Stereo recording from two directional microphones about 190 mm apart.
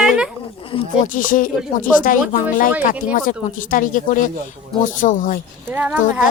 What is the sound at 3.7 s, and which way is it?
Speech, 45° left (ahead or behind).